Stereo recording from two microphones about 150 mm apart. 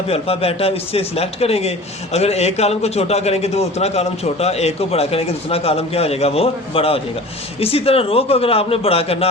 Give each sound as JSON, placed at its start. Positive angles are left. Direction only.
{"t": 0.1, "sound": "a man's voice", "side_deg": 40}